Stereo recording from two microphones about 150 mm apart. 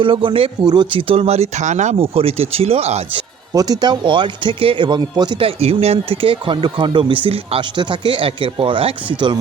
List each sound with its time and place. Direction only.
0.0 s speech: 35° right (ahead or behind)
3.5 s speech: 25° right (ahead or behind)